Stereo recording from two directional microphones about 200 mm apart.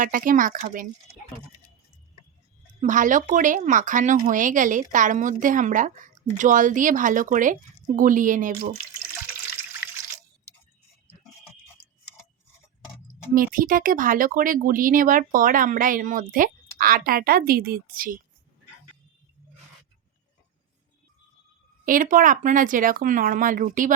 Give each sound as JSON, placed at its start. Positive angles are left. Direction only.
{"t": 0.0, "sound": "speech", "side_deg": -45}
{"t": 2.8, "sound": "a woman's voice", "side_deg": -40}
{"t": 13.3, "sound": "speech", "side_deg": -45}
{"t": 21.8, "sound": "a woman's voice", "side_deg": -45}